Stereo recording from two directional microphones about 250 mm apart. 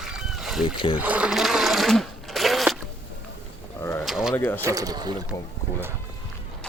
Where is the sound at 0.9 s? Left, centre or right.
Centre.